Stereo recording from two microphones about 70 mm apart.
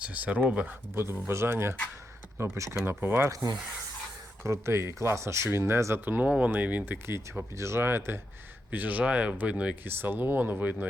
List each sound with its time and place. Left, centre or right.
0.0 s speech: centre
0.9 s speech: right
4.4 s speech: right
6.1 s speech: right
7.5 s speech: right
8.7 s speech: right
9.8 s speech: right